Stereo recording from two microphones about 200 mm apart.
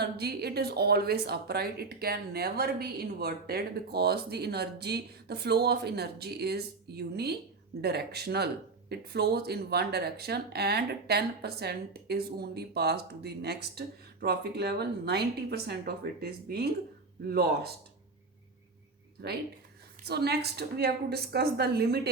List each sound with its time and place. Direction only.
0.0 s speech: 55° right (ahead or behind)
20.1 s speech: 55° right (ahead or behind)